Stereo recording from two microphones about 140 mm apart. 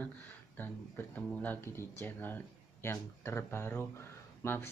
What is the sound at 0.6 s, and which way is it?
Speech, 10° left (ahead or behind).